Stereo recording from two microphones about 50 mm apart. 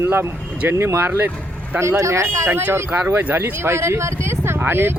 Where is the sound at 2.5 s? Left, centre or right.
Right.